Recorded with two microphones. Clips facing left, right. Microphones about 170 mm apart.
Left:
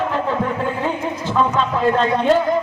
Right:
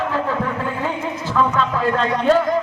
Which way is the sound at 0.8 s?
20° left (ahead or behind).